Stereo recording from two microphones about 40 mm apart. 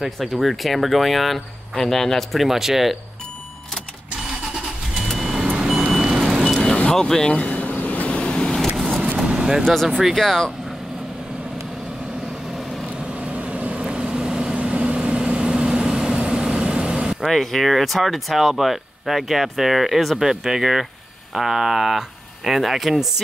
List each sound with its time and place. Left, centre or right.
0.0 s speech: centre
5.0 s vehicle: centre
5.9 s reversing beeps: centre
6.9 s speech: centre
7.4 s vehicle: left
8.1 s vehicle: centre
8.7 s vehicle: centre
9.2 s vehicle: right
9.7 s speech: centre
13.0 s vehicle: right
13.8 s vehicle: centre
17.3 s speech: centre